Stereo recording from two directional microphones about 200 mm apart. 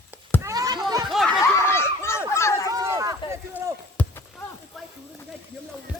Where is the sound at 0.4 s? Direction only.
20° right (ahead or behind).